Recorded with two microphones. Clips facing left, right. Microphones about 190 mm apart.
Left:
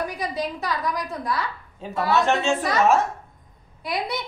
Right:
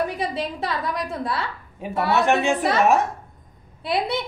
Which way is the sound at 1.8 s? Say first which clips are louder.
Right 1 dB; 15° right (ahead or behind).